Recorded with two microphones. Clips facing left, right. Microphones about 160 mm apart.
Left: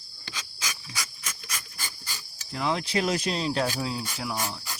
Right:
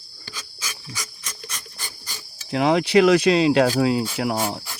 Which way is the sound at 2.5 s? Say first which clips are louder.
Right 10 dB; 75° right (ahead or behind).